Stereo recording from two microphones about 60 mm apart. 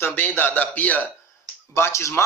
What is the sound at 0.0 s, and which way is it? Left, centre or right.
A man's voice, left.